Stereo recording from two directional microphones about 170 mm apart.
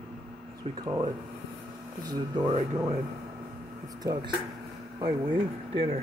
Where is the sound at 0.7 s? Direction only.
20° right (ahead or behind).